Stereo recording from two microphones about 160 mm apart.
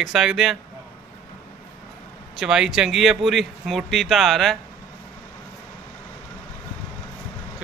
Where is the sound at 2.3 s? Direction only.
5° right (ahead or behind).